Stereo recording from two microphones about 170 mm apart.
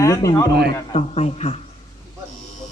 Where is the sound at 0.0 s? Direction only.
20° left (ahead or behind).